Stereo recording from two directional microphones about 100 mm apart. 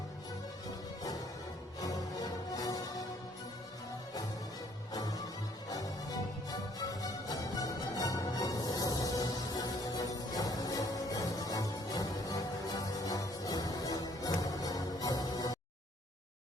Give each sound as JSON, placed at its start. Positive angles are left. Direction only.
{"t": 1.8, "sound": "music", "side_deg": 35}
{"t": 4.9, "sound": "music", "side_deg": 40}